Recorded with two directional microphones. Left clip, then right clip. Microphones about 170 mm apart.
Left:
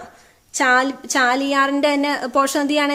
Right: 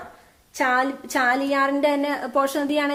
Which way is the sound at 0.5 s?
35° left (ahead or behind).